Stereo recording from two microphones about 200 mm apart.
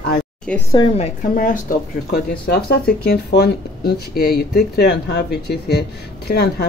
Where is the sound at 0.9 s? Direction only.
35° left (ahead or behind).